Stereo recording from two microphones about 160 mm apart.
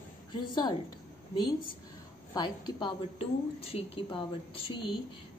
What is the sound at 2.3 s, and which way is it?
A woman's voice, 30° left (ahead or behind).